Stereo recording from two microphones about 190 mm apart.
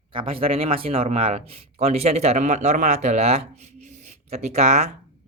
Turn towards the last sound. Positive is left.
turn(degrees=-35)  # may be behind; listen again after turning